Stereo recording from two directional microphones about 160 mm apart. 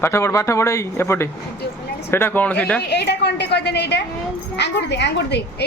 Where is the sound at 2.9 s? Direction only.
90° left.